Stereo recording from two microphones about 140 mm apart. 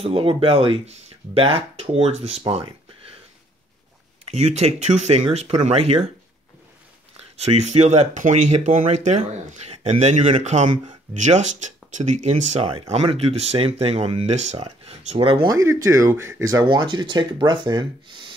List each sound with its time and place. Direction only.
0.0 s speech: 40° right (ahead or behind)
4.3 s speech: 50° right (ahead or behind)
7.3 s speech: 50° right (ahead or behind)
12.9 s speech: 45° right (ahead or behind)
15.5 s speech: 25° right (ahead or behind)
16.6 s speech: 35° right (ahead or behind)